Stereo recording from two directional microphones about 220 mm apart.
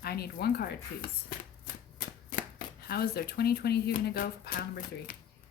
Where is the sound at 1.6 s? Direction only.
40° left (ahead or behind).